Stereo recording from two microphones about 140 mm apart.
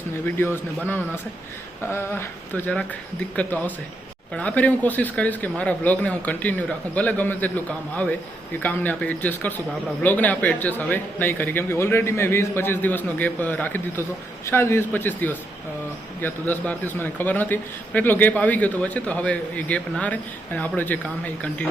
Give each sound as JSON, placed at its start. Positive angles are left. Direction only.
{"t": 0.3, "sound": "a man's voice", "side_deg": 15}
{"t": 4.4, "sound": "a man's voice", "side_deg": 10}